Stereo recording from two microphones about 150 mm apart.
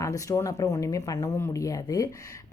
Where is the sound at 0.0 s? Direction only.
20° left (ahead or behind).